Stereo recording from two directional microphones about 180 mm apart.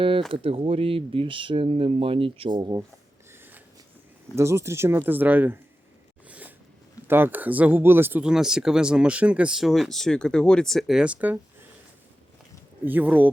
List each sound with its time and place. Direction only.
0.3 s speech: 30° right (ahead or behind)
4.4 s speech: 15° right (ahead or behind)
6.2 s a sound: 10° right (ahead or behind)
7.1 s speech: 10° right (ahead or behind)
12.8 s speech: 10° right (ahead or behind)